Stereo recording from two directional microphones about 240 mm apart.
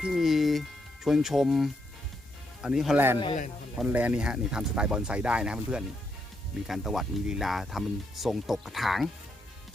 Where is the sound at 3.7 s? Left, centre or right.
Centre.